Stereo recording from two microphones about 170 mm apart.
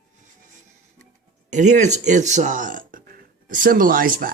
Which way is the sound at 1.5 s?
45° right (ahead or behind).